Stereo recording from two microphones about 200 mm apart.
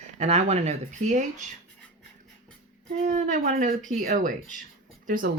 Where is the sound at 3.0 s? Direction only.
40° right (ahead or behind).